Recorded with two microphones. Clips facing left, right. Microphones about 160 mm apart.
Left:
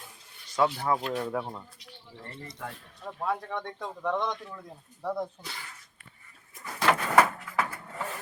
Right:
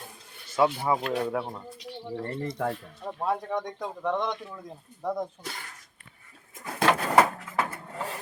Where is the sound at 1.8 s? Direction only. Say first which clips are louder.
Right 13 dB; 65° right (ahead or behind).